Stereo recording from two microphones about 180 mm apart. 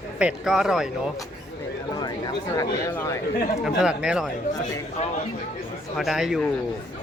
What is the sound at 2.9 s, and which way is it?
Speech, 10° left (ahead or behind).